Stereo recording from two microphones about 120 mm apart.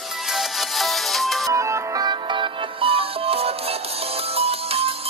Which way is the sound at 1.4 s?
25° right (ahead or behind).